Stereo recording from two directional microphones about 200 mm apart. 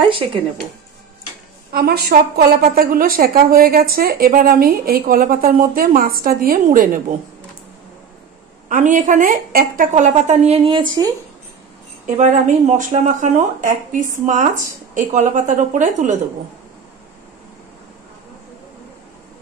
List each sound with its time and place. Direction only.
1.7 s a woman's voice: 50° right (ahead or behind)
8.6 s a woman's voice: 40° right (ahead or behind); by 11.1 s 20° right (ahead or behind)
12.2 s a woman's voice: 35° right (ahead or behind)